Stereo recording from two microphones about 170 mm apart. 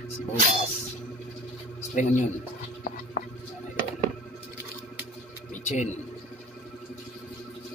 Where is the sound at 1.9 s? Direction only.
45° left (ahead or behind).